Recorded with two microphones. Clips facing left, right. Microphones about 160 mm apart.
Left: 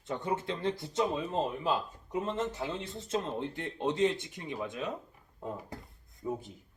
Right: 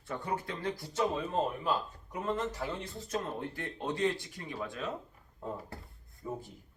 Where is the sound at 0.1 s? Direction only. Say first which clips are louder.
Left 3 dB; 20° left (ahead or behind).